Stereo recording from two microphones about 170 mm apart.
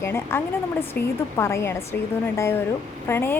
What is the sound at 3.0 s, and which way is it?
Speech, 15° left (ahead or behind).